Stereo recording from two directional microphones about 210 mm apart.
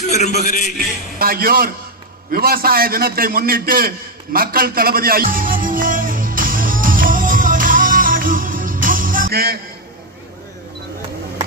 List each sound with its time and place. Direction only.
0.0 s a man's voice: 35° left (ahead or behind)
1.2 s a man's voice: 45° right (ahead or behind)
2.3 s a sound: 45° right (ahead or behind)